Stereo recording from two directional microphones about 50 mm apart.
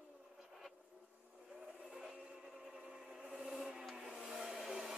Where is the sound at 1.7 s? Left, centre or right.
Right.